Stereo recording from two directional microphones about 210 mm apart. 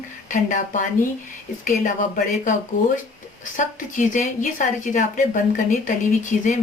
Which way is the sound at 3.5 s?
35° left (ahead or behind).